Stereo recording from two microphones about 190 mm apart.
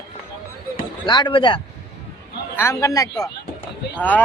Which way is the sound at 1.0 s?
25° left (ahead or behind).